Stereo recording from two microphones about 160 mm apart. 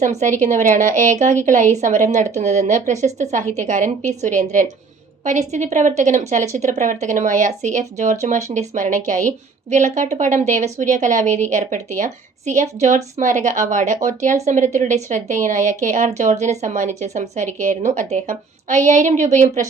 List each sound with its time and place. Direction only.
0.0 s a woman's voice: 50° right (ahead or behind)